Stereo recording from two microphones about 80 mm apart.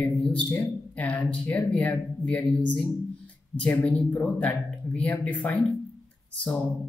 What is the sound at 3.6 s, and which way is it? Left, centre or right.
Speech, centre.